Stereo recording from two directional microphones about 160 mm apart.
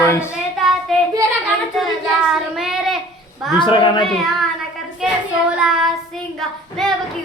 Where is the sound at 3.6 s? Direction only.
30° left (ahead or behind).